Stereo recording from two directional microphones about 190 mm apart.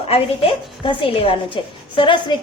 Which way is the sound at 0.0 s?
30° left (ahead or behind).